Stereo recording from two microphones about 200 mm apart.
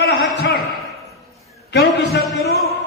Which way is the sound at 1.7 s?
55° left (ahead or behind).